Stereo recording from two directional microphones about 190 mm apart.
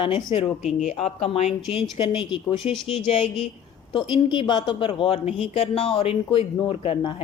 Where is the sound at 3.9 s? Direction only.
25° left (ahead or behind).